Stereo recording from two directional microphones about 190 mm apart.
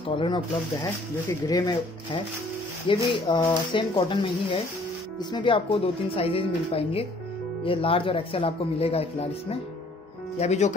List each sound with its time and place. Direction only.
1.5 s speech: 25° left (ahead or behind)